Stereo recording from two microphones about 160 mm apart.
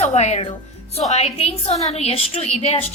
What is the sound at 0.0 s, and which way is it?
A woman's voice, 45° left (ahead or behind).